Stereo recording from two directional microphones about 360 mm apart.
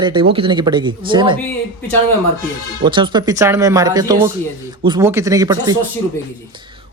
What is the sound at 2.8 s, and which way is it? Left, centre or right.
Speech, centre.